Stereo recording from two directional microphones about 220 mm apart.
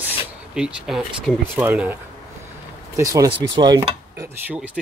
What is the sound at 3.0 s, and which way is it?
Speech, 15° right (ahead or behind).